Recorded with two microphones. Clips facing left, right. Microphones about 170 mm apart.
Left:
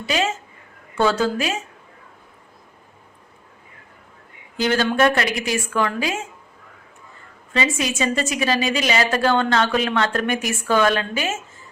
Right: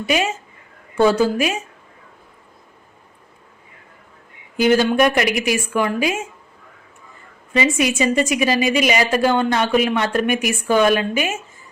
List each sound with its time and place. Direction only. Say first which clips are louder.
0.1 s a woman's voice: right 2 dB; 15° right (ahead or behind)
4.5 s a woman's voice: right 4 dB; 10° right (ahead or behind)
7.5 s a woman's voice: right 4 dB; 15° right (ahead or behind)